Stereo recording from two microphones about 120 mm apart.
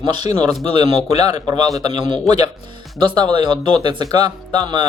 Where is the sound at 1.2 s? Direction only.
40° right (ahead or behind).